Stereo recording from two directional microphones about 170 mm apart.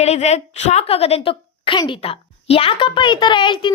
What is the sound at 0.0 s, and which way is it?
A woman's voice, 40° left (ahead or behind).